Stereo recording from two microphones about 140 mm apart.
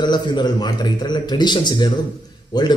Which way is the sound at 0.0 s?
30° left (ahead or behind).